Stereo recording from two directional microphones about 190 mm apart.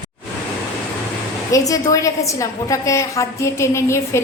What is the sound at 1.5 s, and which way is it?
A woman's voice, 20° left (ahead or behind).